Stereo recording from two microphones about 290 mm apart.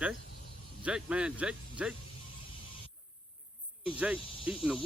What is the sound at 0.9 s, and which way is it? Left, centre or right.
Cricket, centre.